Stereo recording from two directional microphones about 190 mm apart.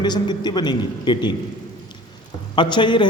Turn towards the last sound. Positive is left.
turn(degrees=25)  # may be behind; listen again after turning